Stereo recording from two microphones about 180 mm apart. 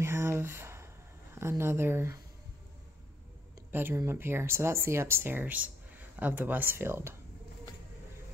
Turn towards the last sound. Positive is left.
turn(degrees=-15)  # may be behind; listen again after turning